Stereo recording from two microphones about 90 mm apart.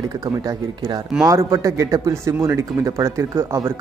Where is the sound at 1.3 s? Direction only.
40° right (ahead or behind).